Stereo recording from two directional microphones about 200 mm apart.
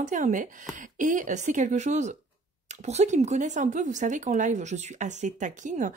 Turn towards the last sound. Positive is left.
turn(degrees=-40)  # may be behind; listen again after turning